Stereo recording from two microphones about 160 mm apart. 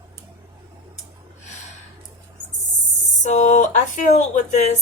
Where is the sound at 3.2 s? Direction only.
50° left (ahead or behind).